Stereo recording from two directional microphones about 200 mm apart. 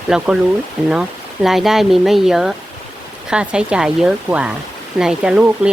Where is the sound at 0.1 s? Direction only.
Centre (ahead or behind).